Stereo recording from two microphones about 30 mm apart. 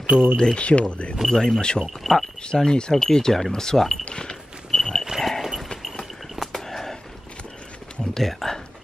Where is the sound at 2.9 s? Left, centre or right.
Centre.